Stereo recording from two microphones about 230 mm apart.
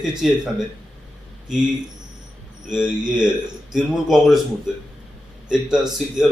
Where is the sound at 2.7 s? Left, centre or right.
Centre.